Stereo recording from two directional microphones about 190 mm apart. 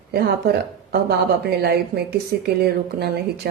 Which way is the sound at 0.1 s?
55° right (ahead or behind).